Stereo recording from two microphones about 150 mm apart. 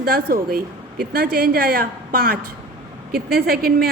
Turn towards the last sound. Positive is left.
turn(degrees=-90)